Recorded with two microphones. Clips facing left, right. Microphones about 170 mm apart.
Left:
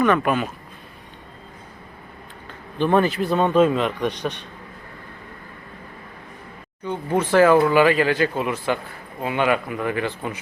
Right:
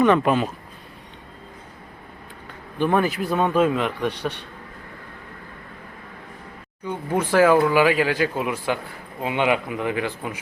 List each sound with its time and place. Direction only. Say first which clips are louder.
0.0 s speech: right 2 dB; 25° right (ahead or behind)
2.7 s speech: left 2 dB; 10° right (ahead or behind)
4.0 s a man's voice: left 1 dB; 15° left (ahead or behind)
7.2 s speech: left 1 dB; 10° right (ahead or behind)